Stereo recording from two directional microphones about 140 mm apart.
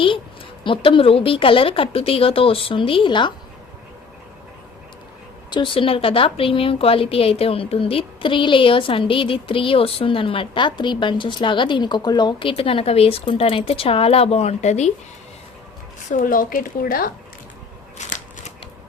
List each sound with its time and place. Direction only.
0.6 s a woman's voice: 40° left (ahead or behind)
5.5 s a woman's voice: 35° left (ahead or behind); by 14.9 s 55° left (ahead or behind)
16.0 s a woman's voice: 70° left (ahead or behind); by 17.1 s 90° left
17.9 s shuffling cards: 55° left (ahead or behind)